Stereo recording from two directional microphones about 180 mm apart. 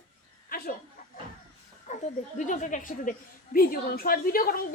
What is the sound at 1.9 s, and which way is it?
A woman's voice, 40° left (ahead or behind).